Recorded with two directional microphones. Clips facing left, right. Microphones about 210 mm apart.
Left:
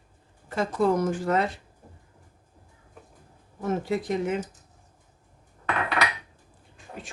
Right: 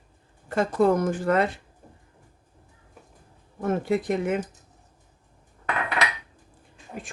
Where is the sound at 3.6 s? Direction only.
55° right (ahead or behind).